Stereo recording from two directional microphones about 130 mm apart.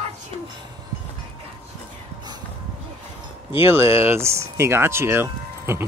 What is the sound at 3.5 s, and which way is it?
Speech, 20° right (ahead or behind).